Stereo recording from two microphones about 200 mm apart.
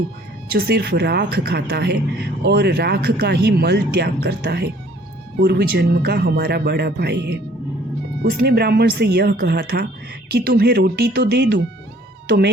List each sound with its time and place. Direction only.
0.5 s speech: 55° right (ahead or behind)